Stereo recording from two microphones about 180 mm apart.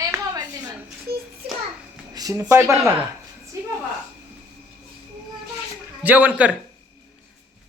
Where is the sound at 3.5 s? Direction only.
20° right (ahead or behind).